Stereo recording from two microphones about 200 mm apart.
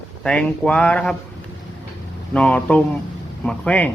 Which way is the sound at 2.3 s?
5° left (ahead or behind).